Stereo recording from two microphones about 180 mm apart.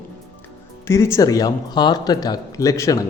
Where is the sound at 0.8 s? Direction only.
15° left (ahead or behind).